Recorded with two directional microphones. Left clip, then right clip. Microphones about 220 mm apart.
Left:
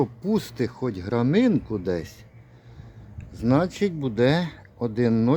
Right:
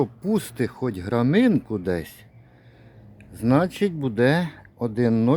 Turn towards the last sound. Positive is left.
turn(degrees=-10)  # may be behind; listen again after turning